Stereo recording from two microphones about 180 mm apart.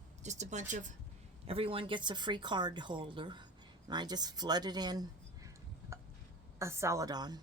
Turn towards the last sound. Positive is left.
turn(degrees=-20)  # may be behind; listen again after turning